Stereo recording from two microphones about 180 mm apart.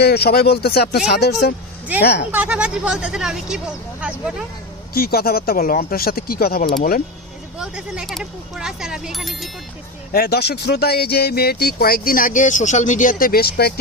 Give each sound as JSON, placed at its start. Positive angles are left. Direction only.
{"t": 0.0, "sound": "speech", "side_deg": 60}
{"t": 2.3, "sound": "speech", "side_deg": -10}
{"t": 4.9, "sound": "speech", "side_deg": 55}
{"t": 7.6, "sound": "speech", "side_deg": 0}
{"t": 10.1, "sound": "speech", "side_deg": 60}